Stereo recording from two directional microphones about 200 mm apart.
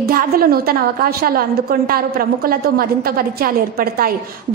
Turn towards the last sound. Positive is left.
turn(degrees=-50)  # may be behind; listen again after turning